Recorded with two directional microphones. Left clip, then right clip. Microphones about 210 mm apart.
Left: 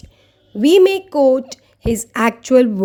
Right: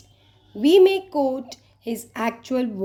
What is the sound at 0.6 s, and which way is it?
A woman's voice, 50° left (ahead or behind).